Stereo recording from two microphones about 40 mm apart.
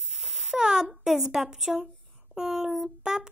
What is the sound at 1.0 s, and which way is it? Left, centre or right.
Speech, centre.